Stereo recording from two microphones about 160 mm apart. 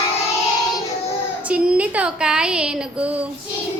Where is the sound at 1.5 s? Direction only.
5° right (ahead or behind).